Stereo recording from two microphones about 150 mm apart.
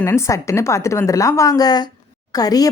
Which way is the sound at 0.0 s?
20° left (ahead or behind).